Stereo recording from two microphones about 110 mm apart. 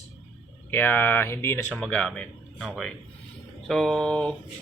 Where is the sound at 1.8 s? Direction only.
5° left (ahead or behind).